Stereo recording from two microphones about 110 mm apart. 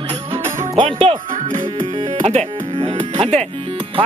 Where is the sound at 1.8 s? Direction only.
75° right (ahead or behind).